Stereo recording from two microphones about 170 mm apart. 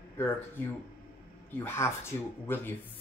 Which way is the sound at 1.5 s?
10° left (ahead or behind).